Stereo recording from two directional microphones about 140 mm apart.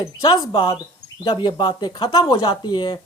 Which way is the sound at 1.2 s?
35° left (ahead or behind).